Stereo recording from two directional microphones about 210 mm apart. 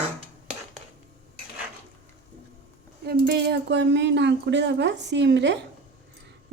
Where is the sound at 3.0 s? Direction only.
50° right (ahead or behind).